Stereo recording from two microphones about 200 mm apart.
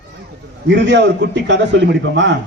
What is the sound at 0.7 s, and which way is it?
A man's voice, 60° right (ahead or behind).